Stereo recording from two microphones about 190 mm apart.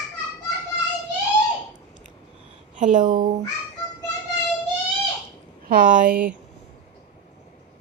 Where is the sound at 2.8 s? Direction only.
40° right (ahead or behind).